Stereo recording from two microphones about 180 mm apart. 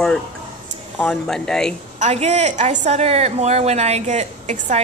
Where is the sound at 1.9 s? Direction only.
40° right (ahead or behind).